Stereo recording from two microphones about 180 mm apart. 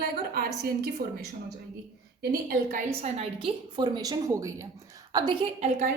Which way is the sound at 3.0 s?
30° right (ahead or behind).